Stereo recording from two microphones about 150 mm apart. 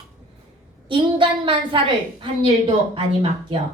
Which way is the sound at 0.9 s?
35° right (ahead or behind).